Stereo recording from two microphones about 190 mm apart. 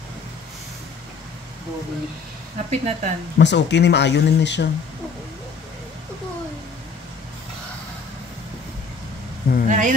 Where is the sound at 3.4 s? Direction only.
65° left (ahead or behind).